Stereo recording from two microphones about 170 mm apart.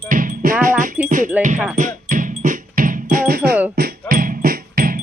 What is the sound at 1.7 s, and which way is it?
Music, 50° right (ahead or behind).